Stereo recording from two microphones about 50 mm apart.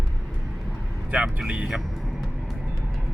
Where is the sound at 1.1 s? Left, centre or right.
Right.